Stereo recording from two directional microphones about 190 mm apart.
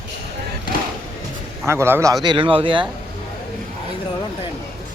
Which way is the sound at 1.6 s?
15° right (ahead or behind).